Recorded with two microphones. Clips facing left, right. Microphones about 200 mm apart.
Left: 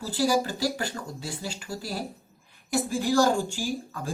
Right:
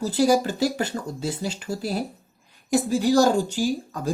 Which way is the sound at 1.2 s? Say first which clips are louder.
Right 8 dB; 40° right (ahead or behind).